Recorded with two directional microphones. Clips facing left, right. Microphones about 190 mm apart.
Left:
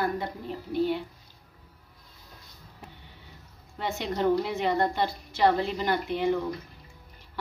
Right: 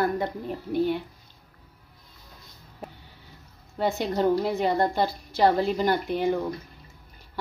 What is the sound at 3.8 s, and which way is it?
A woman's voice, 40° right (ahead or behind).